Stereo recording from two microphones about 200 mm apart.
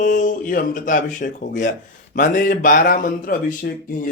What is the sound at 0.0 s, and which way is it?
A man's voice, 40° left (ahead or behind).